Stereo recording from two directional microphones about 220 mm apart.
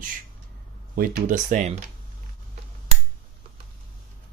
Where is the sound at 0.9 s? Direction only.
40° right (ahead or behind).